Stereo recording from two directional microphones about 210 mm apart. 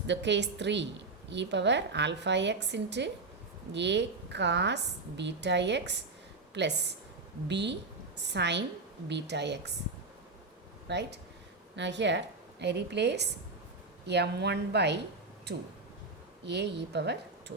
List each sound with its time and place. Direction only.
0.1 s a woman's voice: 55° right (ahead or behind)
10.8 s a woman's voice: 55° right (ahead or behind)